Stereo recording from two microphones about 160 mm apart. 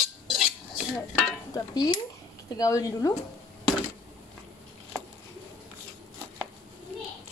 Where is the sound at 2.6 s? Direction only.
20° left (ahead or behind).